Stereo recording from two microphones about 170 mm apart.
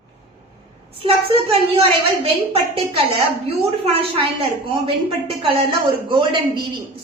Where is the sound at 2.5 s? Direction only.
35° right (ahead or behind).